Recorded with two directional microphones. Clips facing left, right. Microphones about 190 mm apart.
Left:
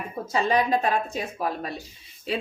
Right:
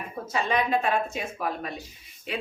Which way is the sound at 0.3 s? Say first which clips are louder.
Left 3 dB; 35° left (ahead or behind).